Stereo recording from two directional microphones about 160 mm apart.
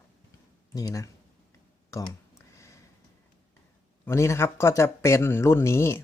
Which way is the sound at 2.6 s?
20° left (ahead or behind).